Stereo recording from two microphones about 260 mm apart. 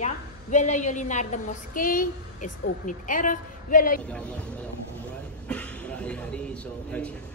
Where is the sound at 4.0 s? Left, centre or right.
Centre.